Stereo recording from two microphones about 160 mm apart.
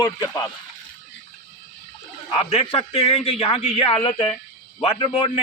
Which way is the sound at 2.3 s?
35° left (ahead or behind).